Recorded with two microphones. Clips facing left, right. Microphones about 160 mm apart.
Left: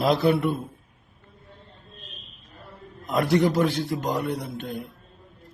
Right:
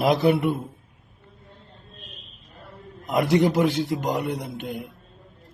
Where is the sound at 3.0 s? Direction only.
15° right (ahead or behind).